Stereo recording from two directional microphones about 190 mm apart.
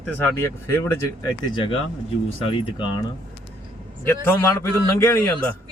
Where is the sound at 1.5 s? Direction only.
25° left (ahead or behind).